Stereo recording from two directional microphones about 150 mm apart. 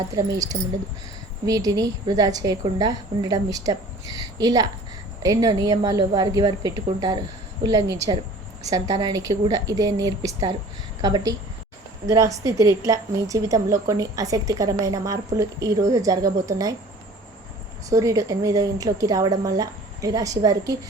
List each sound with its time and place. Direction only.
0.2 s a woman's voice: 25° right (ahead or behind)
17.8 s a woman's voice: 20° right (ahead or behind)